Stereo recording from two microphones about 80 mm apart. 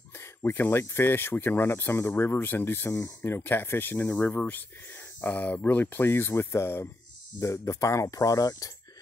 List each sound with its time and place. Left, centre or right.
0.2 s speech: left
4.0 s speech: centre; by 8.7 s left